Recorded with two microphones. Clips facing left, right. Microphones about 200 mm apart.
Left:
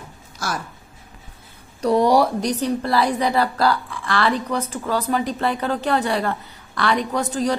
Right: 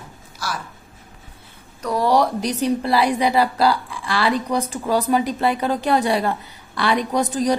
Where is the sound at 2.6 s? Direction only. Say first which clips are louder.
Right 3 dB; 10° right (ahead or behind).